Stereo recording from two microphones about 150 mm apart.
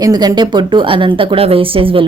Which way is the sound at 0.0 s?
25° right (ahead or behind).